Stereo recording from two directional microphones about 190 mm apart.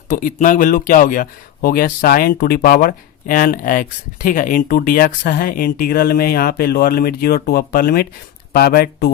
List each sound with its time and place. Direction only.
0.1 s speech: 45° left (ahead or behind)